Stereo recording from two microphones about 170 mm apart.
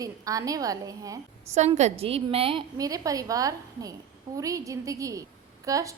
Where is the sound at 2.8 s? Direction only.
20° right (ahead or behind).